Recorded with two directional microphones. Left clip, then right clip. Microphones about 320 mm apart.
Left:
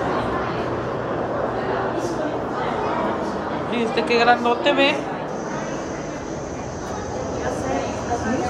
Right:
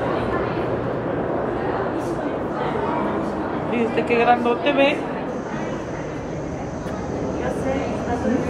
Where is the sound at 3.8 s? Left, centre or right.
Left.